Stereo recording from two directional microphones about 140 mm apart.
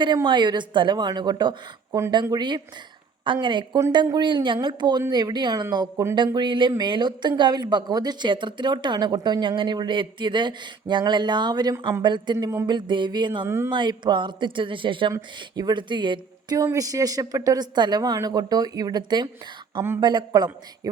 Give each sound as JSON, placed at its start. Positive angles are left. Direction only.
{"t": 0.3, "sound": "speech", "side_deg": -35}
{"t": 12.0, "sound": "speech", "side_deg": -35}
{"t": 13.4, "sound": "speech", "side_deg": -20}
{"t": 13.7, "sound": "speech", "side_deg": -35}